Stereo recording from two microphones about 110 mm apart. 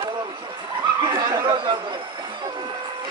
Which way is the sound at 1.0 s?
40° right (ahead or behind).